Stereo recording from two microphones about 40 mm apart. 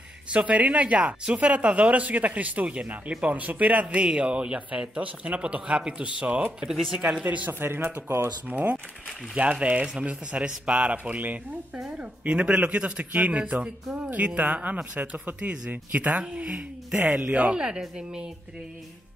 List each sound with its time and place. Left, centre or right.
0.3 s speech: right
3.8 s speech: right
7.2 s speech: right
7.6 s speech: right
9.4 s speech: right
12.3 s speech: right
15.7 s speech: right
17.6 s speech: centre